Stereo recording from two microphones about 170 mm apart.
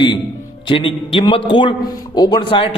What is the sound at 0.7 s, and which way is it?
A man's voice, 30° left (ahead or behind).